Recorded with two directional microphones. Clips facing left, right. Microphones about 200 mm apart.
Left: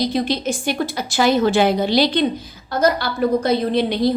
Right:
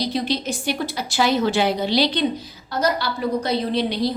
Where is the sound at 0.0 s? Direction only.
50° left (ahead or behind).